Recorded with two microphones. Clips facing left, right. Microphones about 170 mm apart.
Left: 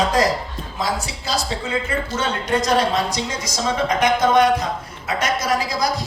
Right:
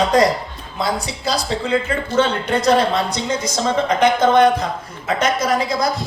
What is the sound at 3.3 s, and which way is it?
Speech, 30° right (ahead or behind).